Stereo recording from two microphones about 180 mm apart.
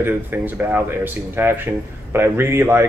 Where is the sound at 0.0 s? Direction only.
10° right (ahead or behind).